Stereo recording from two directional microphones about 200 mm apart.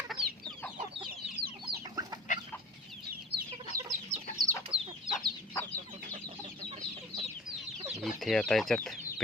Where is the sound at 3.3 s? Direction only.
50° right (ahead or behind).